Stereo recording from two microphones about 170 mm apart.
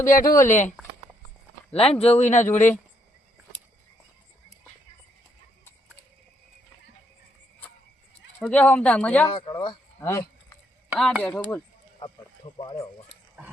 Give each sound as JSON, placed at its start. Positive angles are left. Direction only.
{"t": 0.1, "sound": "speech", "side_deg": 55}
{"t": 0.3, "sound": "speech", "side_deg": 15}
{"t": 1.7, "sound": "a man's voice", "side_deg": 35}
{"t": 8.4, "sound": "speech", "side_deg": 10}
{"t": 9.3, "sound": "speech", "side_deg": 30}
{"t": 10.0, "sound": "speech", "side_deg": 15}
{"t": 10.8, "sound": "speech", "side_deg": -5}
{"t": 12.5, "sound": "speech", "side_deg": 20}